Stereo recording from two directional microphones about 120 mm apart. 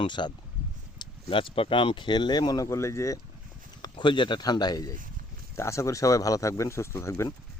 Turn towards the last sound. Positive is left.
turn(degrees=25)  # may be behind; listen again after turning